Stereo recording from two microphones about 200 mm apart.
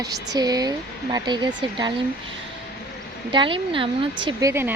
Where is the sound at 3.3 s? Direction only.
25° right (ahead or behind).